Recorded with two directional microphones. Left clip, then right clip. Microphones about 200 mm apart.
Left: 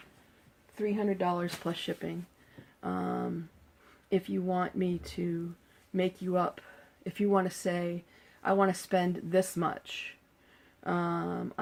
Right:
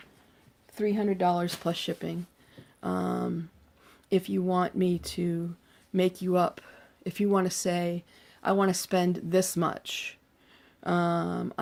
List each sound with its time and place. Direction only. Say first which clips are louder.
0.8 s speech: right 4 dB; 55° right (ahead or behind)
2.8 s a sound: right 3 dB; 45° right (ahead or behind)
4.1 s speech: right 4 dB; 50° right (ahead or behind)